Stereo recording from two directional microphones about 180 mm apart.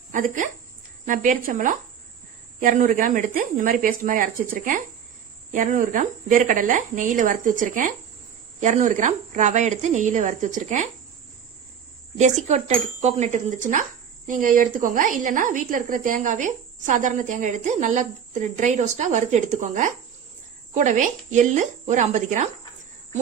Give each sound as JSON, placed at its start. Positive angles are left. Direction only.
{"t": 0.1, "sound": "a woman's voice", "side_deg": -45}
{"t": 12.1, "sound": "a woman's voice", "side_deg": -40}